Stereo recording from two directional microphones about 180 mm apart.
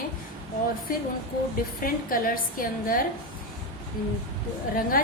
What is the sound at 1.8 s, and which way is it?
A woman's voice, 50° left (ahead or behind).